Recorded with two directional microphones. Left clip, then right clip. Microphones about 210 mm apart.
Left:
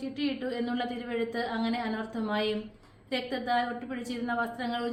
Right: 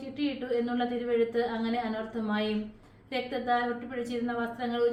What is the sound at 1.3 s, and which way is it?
A woman's voice, 45° left (ahead or behind).